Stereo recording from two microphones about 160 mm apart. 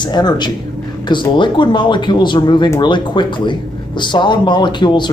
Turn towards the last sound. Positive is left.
turn(degrees=30)  # may be behind; listen again after turning